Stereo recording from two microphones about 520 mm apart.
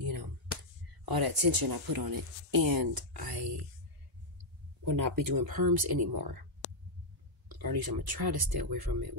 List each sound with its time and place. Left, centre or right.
0.0 s a sound: right
1.5 s speech: right
4.8 s speech: right
7.4 s speech: right